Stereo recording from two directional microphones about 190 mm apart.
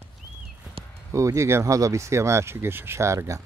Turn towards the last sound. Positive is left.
turn(degrees=-15)  # may be behind; listen again after turning